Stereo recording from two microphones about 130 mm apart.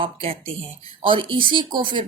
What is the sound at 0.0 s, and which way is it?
Speech, 45° right (ahead or behind).